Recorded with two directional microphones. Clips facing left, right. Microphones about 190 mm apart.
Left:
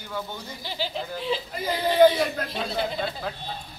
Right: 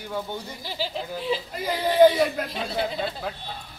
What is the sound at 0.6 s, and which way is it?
Speech, 5° right (ahead or behind).